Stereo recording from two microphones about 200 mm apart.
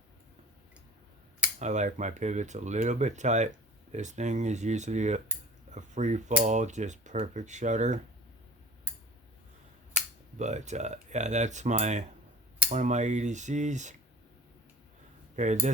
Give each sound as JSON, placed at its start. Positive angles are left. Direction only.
{"t": 1.5, "sound": "speech", "side_deg": -35}
{"t": 10.3, "sound": "speech", "side_deg": -35}
{"t": 15.4, "sound": "speech", "side_deg": -35}